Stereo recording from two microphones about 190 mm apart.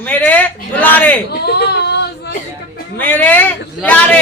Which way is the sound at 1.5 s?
60° left (ahead or behind).